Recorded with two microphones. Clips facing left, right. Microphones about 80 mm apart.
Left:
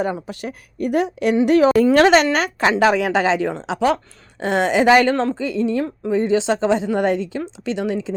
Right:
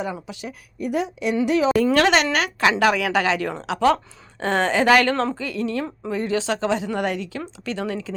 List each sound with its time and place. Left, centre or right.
0.0 s speech: left
1.8 s a woman's voice: left
3.9 s speech: centre
5.1 s speech: centre
5.4 s a woman's voice: left
7.6 s a woman's voice: centre